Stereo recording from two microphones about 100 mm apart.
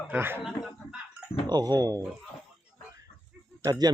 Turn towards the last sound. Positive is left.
turn(degrees=-40)  # may be behind; listen again after turning